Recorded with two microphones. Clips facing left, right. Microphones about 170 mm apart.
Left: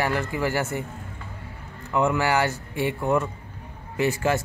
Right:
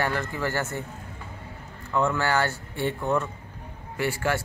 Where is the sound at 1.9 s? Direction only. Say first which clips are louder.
Left 2 dB; 15° left (ahead or behind).